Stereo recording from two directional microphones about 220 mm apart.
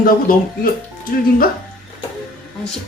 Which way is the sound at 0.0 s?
40° left (ahead or behind).